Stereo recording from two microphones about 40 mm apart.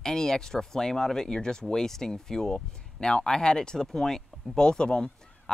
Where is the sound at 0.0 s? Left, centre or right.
Centre.